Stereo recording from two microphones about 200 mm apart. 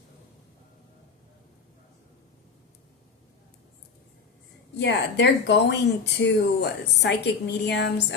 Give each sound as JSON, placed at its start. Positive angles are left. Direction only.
{"t": 4.8, "sound": "speech", "side_deg": 60}